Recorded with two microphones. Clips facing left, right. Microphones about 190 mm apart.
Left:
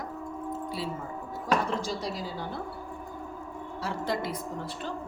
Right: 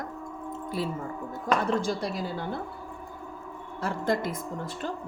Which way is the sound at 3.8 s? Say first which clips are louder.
Right 4 dB; 50° right (ahead or behind).